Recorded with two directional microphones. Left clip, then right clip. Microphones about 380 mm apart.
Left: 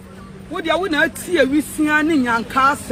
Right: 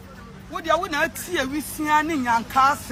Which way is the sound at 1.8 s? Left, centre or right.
Centre.